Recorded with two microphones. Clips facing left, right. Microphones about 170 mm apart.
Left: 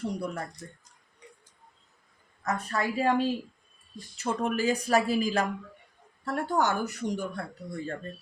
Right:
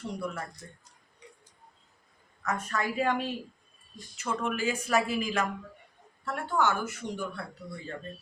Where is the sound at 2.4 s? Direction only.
35° left (ahead or behind).